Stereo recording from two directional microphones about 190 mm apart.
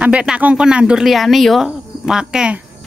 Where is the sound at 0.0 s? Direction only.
5° right (ahead or behind).